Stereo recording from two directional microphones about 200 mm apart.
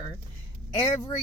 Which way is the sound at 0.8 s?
20° left (ahead or behind).